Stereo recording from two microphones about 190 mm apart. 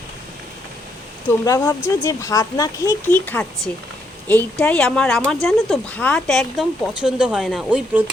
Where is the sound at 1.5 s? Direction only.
20° left (ahead or behind).